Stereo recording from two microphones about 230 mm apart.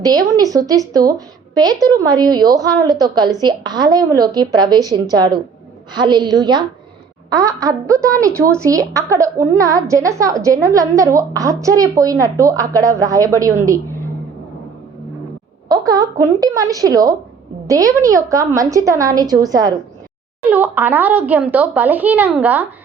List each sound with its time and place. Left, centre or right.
0.0 s a woman's voice: centre
15.7 s a woman's voice: centre